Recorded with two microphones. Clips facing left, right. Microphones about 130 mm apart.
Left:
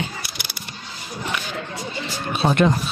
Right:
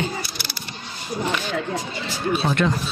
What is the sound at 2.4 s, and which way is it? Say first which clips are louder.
Speech: left 6 dB; 25° left (ahead or behind).